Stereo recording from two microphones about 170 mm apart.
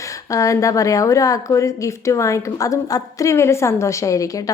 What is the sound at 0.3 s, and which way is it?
A woman's voice, 20° left (ahead or behind).